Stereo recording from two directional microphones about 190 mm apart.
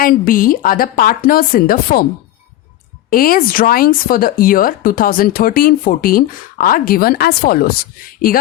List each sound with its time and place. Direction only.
0.0 s speech: 50° left (ahead or behind)
3.1 s speech: 50° left (ahead or behind)